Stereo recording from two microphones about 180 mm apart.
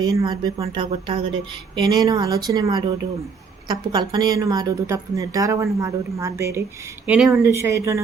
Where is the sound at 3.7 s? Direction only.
20° right (ahead or behind).